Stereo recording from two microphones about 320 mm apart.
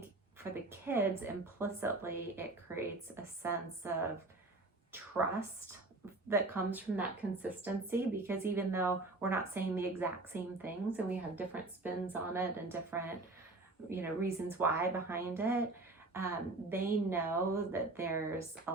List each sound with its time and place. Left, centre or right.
0.5 s a sound: centre
1.2 s speech: centre
6.2 s a woman's voice: centre